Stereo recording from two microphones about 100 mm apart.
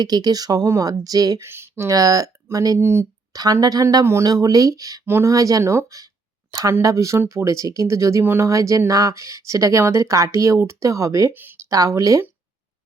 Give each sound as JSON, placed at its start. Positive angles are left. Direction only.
{"t": 0.0, "sound": "speech", "side_deg": -40}
{"t": 1.5, "sound": "speech", "side_deg": -25}
{"t": 3.3, "sound": "speech", "side_deg": -40}
{"t": 11.3, "sound": "a sound", "side_deg": -20}
{"t": 11.7, "sound": "speech", "side_deg": -35}